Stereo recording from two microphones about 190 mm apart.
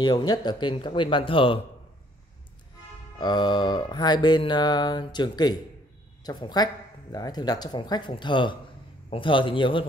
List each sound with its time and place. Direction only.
0.0 s mantra: 20° left (ahead or behind)
3.2 s mantra: 25° left (ahead or behind)